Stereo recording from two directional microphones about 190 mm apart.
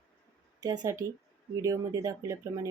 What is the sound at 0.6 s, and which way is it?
Speech, 20° right (ahead or behind).